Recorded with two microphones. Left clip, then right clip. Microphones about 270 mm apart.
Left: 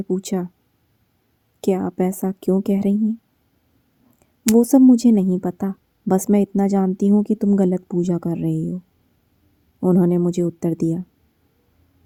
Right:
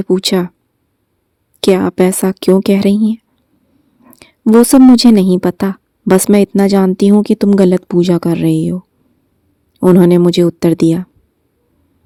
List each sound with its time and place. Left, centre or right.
0.0 s speech: right
1.7 s speech: right
2.4 s speech: right
4.2 s a woman's voice: right
6.1 s speech: right
9.8 s speech: right